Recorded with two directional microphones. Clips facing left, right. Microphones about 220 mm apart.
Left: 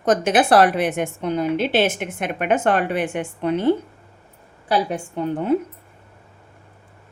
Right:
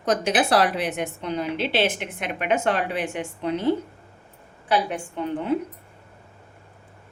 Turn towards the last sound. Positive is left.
turn(degrees=40)  # may be behind; listen again after turning